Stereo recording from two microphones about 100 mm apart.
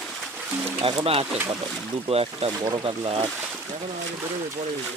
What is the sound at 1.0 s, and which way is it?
Speech, 75° right (ahead or behind).